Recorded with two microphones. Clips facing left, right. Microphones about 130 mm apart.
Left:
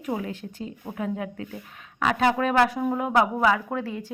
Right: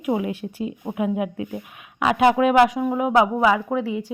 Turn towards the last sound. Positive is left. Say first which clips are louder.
# right 6 dB
turn(degrees=-15)  # may be behind; listen again after turning